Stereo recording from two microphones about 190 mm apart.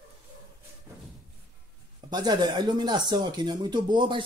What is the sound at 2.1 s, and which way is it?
Speech, 20° right (ahead or behind).